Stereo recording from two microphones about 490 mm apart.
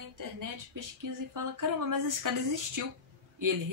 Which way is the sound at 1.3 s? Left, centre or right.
Right.